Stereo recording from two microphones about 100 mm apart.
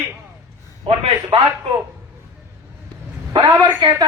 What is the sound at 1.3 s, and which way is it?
Speech, 70° right (ahead or behind).